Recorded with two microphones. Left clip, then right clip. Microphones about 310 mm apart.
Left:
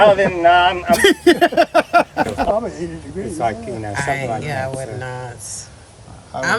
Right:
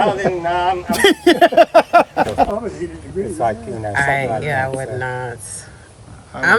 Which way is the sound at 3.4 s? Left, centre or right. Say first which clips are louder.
Right 1 dB; centre.